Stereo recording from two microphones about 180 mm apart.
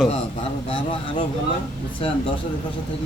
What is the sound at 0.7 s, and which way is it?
A man's voice, 30° left (ahead or behind).